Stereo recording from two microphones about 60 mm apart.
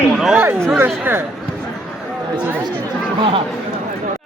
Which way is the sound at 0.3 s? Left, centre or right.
Right.